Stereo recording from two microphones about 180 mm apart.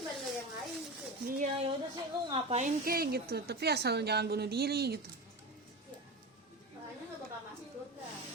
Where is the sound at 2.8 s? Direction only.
55° right (ahead or behind).